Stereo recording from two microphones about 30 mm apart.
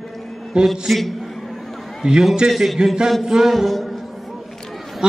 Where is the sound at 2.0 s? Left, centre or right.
Right.